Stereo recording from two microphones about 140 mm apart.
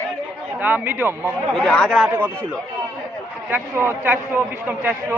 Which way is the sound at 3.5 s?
15° right (ahead or behind).